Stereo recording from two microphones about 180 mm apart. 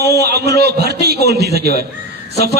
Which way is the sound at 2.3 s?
60° right (ahead or behind).